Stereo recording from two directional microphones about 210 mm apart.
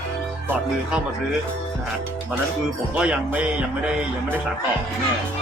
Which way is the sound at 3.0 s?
5° right (ahead or behind).